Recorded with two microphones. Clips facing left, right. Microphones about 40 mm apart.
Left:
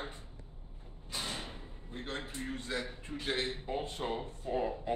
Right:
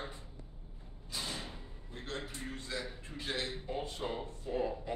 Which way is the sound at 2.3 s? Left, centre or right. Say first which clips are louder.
Left 3 dB; left.